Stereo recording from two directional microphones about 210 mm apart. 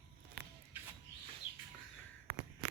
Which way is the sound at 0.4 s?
45° right (ahead or behind).